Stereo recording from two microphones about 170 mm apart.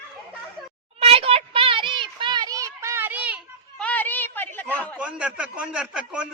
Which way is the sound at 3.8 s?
10° left (ahead or behind).